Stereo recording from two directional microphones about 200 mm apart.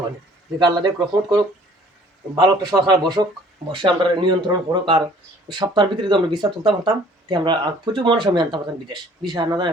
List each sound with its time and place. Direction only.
0.6 s speech: 20° right (ahead or behind)